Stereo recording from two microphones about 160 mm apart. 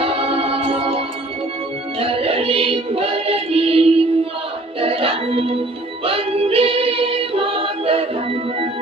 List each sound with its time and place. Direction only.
0.0 s music: 35° right (ahead or behind)
6.1 s choir: 35° right (ahead or behind)